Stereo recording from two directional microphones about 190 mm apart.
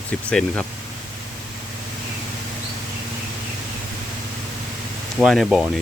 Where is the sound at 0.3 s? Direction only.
5° left (ahead or behind).